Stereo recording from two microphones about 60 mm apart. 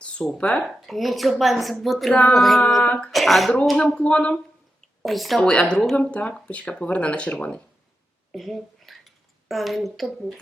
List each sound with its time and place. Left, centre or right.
0.0 s a sound: centre
0.4 s a woman's voice: centre
3.1 s a woman's voice: centre
3.8 s speech: centre
5.0 s a woman's voice: centre
5.4 s a woman's voice: centre
6.0 s speech: left
8.3 s speech: centre